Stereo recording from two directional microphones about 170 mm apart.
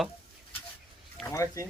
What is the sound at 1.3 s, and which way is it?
Speech, 20° left (ahead or behind).